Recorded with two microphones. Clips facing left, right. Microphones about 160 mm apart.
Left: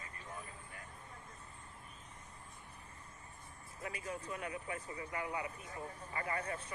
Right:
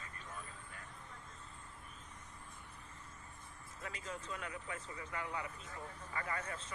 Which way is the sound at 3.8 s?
20° left (ahead or behind).